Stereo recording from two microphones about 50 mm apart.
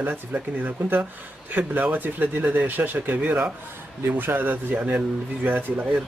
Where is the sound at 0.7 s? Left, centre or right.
Right.